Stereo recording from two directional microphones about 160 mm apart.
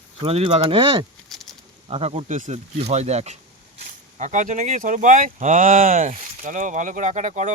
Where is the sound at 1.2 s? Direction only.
Centre (ahead or behind).